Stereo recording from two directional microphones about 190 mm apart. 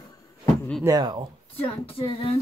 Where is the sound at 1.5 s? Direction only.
30° left (ahead or behind).